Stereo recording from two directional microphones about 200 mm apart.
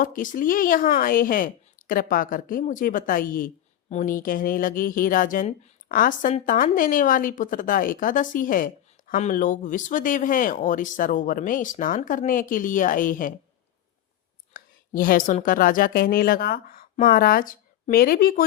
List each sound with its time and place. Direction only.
0.0 s speech: 40° left (ahead or behind)
14.5 s a sound: 45° left (ahead or behind)
15.4 s speech: 45° left (ahead or behind)